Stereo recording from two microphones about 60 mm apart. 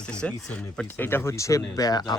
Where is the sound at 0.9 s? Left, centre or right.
Left.